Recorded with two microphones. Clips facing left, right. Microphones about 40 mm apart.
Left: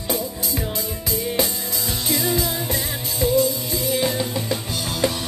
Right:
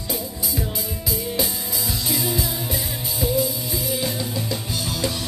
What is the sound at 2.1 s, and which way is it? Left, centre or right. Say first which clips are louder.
Music: left 4 dB; centre.